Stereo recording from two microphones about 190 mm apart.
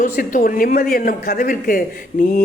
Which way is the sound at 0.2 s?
45° left (ahead or behind).